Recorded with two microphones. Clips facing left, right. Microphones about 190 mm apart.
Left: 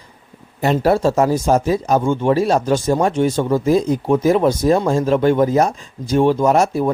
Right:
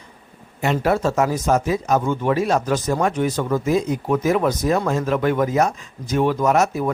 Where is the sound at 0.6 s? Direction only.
35° left (ahead or behind).